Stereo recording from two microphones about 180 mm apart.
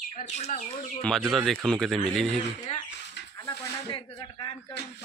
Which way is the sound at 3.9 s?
30° left (ahead or behind).